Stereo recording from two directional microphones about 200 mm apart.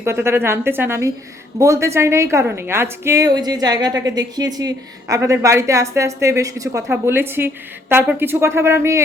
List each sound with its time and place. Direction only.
0.0 s a woman's voice: 15° right (ahead or behind)